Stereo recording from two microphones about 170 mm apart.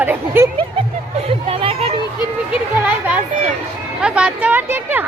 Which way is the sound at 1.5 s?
35° right (ahead or behind).